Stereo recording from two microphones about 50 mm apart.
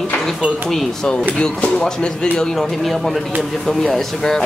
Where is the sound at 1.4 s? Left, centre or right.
Left.